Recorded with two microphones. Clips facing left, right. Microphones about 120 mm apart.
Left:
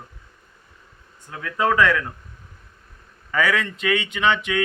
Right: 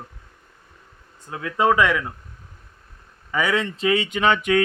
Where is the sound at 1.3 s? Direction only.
20° right (ahead or behind).